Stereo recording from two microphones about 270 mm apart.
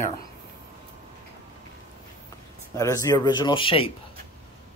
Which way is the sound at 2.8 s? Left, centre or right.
Centre.